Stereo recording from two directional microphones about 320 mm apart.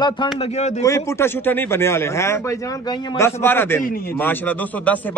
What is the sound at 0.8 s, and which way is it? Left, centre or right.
A man's voice, centre.